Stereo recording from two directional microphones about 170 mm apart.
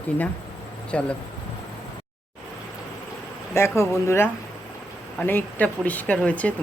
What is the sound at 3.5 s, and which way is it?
Speech, 15° left (ahead or behind).